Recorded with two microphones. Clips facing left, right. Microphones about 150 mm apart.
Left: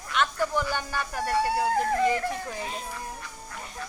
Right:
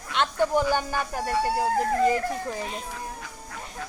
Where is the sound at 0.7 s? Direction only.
45° right (ahead or behind).